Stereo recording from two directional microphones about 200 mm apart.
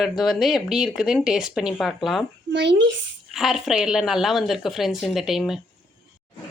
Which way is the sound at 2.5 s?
60° right (ahead or behind).